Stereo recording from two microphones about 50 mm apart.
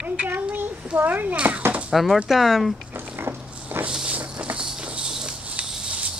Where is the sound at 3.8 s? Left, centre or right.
Right.